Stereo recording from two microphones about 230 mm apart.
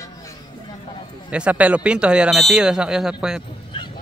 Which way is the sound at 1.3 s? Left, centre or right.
Centre.